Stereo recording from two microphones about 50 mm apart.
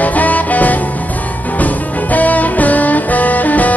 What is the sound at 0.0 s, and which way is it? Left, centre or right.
Music, left.